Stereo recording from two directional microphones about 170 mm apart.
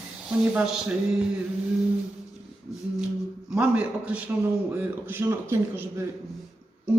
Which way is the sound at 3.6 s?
10° right (ahead or behind).